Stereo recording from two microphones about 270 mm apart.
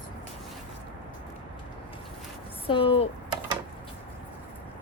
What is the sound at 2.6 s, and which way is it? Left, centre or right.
Speech, centre.